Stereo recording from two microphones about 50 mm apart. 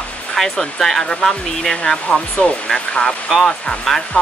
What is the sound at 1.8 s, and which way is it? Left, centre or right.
Speech, centre.